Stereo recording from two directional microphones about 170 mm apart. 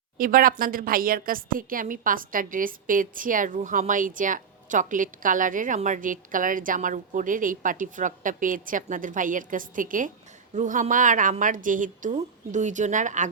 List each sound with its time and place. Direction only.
0.2 s a woman's voice: 55° right (ahead or behind)